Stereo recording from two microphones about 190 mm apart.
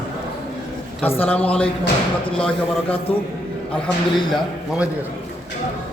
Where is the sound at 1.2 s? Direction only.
10° left (ahead or behind).